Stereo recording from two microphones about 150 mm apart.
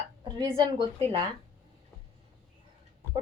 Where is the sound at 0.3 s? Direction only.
30° right (ahead or behind).